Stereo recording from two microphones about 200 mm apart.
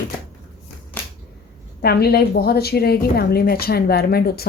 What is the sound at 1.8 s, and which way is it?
A woman's voice, 50° left (ahead or behind).